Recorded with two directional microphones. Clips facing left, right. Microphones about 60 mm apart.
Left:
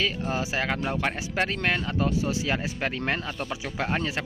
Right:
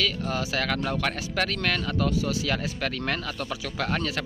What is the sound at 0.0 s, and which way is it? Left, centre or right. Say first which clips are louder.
Speech: even; left.